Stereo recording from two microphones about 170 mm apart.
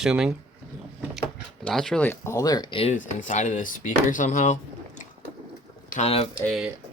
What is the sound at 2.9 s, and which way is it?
Speech, 50° left (ahead or behind).